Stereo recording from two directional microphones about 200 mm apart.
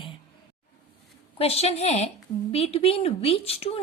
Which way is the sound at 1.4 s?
30° left (ahead or behind).